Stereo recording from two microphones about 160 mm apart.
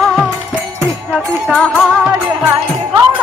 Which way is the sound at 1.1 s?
Centre (ahead or behind).